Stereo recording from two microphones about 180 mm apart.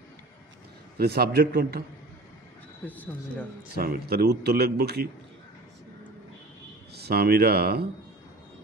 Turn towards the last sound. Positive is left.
turn(degrees=-60)  # may be behind; listen again after turning